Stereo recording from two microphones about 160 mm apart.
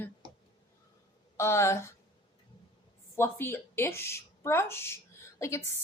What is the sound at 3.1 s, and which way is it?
A woman's voice, 15° left (ahead or behind).